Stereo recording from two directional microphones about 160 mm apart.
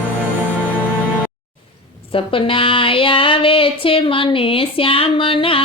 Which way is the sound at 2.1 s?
35° left (ahead or behind).